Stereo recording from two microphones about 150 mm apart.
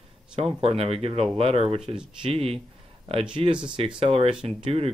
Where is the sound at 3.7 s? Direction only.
40° right (ahead or behind).